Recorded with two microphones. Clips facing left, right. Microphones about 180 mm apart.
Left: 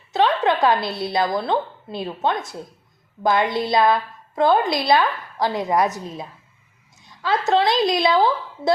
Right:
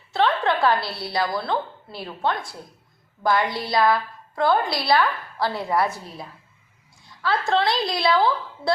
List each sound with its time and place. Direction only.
0.1 s a woman's voice: 20° left (ahead or behind)